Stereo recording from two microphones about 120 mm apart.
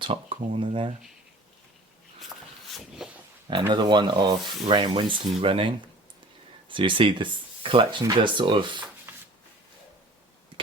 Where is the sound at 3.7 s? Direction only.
40° right (ahead or behind).